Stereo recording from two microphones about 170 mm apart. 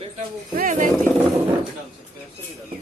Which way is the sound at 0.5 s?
50° right (ahead or behind).